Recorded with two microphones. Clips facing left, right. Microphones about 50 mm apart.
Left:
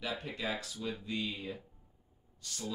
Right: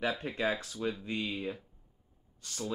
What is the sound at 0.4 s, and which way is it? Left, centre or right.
Speech, right.